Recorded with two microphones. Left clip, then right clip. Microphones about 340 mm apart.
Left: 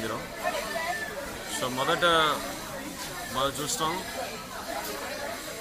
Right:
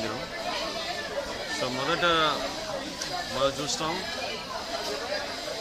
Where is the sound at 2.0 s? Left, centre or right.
Centre.